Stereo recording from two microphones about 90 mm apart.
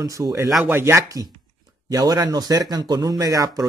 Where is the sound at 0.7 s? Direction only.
30° right (ahead or behind).